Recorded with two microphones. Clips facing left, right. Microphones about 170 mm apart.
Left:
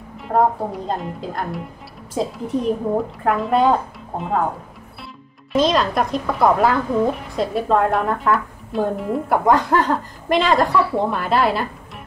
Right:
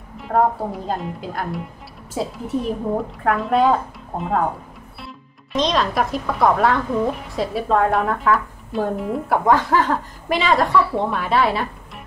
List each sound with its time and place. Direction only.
0.2 s a woman's voice: centre (ahead or behind)